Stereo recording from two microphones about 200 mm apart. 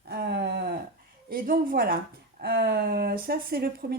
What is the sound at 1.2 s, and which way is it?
Speech, 45° right (ahead or behind).